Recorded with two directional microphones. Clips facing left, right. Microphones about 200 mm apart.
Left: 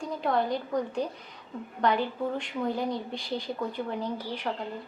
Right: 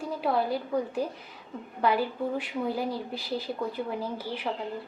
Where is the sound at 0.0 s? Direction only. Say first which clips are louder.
Even; 5° right (ahead or behind).